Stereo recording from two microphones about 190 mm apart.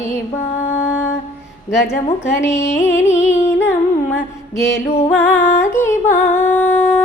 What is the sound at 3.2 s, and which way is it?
Music, 40° left (ahead or behind).